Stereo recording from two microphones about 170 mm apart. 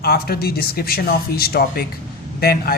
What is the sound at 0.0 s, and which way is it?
A man's voice, 65° left (ahead or behind).